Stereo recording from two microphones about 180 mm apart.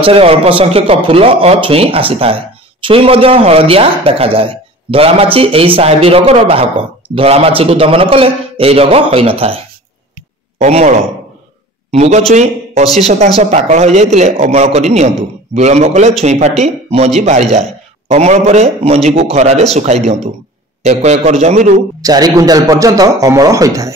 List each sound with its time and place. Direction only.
0.0 s a man's voice: 35° right (ahead or behind)
10.6 s a man's voice: 40° right (ahead or behind)
22.0 s a man's voice: 20° right (ahead or behind)